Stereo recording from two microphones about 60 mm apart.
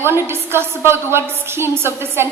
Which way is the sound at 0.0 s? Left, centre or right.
Right.